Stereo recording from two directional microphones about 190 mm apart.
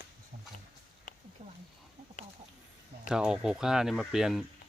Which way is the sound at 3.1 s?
5° right (ahead or behind).